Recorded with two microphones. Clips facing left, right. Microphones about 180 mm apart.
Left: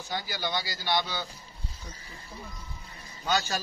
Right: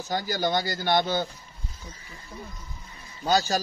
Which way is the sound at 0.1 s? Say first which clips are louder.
Right 7 dB; 45° right (ahead or behind).